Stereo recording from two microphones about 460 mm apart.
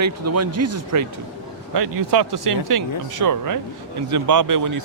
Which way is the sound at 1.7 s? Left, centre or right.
Right.